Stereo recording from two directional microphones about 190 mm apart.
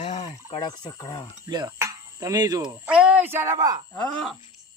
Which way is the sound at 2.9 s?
5° right (ahead or behind).